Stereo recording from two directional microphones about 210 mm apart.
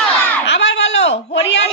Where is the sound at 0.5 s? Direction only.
55° left (ahead or behind).